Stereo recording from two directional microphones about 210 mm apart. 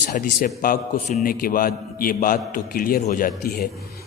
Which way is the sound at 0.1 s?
40° left (ahead or behind).